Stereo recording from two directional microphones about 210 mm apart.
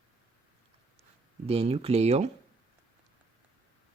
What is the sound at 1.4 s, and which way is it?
Speech, 30° right (ahead or behind).